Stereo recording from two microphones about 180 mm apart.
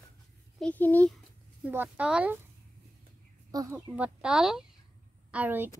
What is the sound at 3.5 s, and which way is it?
Speech, 20° right (ahead or behind).